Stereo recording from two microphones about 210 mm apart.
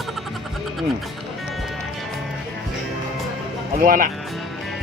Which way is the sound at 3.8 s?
40° right (ahead or behind).